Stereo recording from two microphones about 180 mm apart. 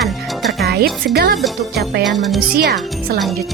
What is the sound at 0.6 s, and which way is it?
Music, 60° right (ahead or behind).